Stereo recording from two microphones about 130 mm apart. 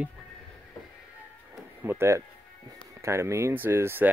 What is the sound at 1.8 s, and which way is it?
Speech, 20° right (ahead or behind).